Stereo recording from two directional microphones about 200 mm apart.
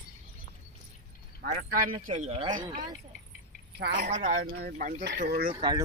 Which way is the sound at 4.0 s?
35° right (ahead or behind).